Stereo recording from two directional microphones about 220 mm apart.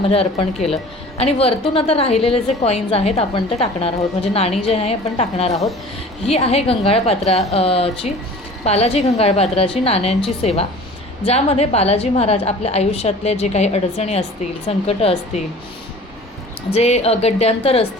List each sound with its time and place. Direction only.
0.1 s a woman's voice: 25° left (ahead or behind)
16.7 s a woman's voice: 30° left (ahead or behind)